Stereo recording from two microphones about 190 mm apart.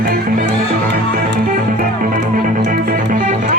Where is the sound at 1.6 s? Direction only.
45° right (ahead or behind).